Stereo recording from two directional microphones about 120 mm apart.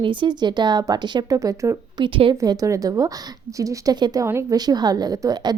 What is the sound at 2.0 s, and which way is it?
Speech, 45° right (ahead or behind).